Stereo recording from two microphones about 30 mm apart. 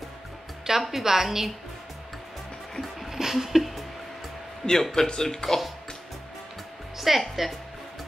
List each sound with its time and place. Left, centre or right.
0.7 s a woman's voice: centre
2.8 s music: centre
4.9 s speech: centre
7.0 s speech: centre